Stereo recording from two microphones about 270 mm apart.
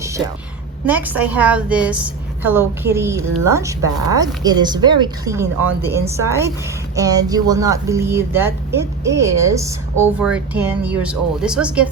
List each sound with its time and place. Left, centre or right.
0.9 s a woman's voice: centre